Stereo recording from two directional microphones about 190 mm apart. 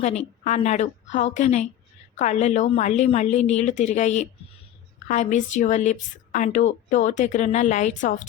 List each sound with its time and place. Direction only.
0.0 s a woman's voice: 35° left (ahead or behind)